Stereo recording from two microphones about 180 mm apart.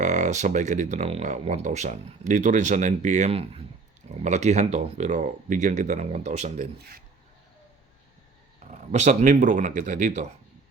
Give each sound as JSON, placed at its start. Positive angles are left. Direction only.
{"t": 0.0, "sound": "speech", "side_deg": -40}
{"t": 8.7, "sound": "a man's voice", "side_deg": -40}